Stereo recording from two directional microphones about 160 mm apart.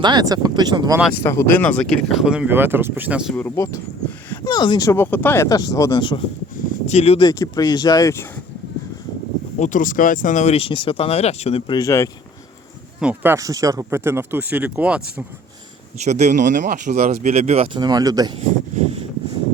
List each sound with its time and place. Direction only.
0.0 s speech: 25° right (ahead or behind)
1.2 s speech: 15° left (ahead or behind); by 3.3 s 5° right (ahead or behind)
3.3 s speech: 15° left (ahead or behind)
4.3 s a sound: 25° left (ahead or behind)
4.9 s speech: 15° left (ahead or behind); by 6.2 s 30° left (ahead or behind)
6.7 s speech: 45° left (ahead or behind)
7.3 s speech: 20° left (ahead or behind)
9.6 s speech: 55° left (ahead or behind)
11.7 s speech: 20° left (ahead or behind)
13.0 s speech: 10° right (ahead or behind)
16.0 s speech: 50° right (ahead or behind)
17.7 s speech: 25° right (ahead or behind)